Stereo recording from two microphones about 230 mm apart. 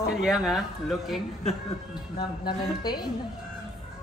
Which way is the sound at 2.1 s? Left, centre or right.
Centre.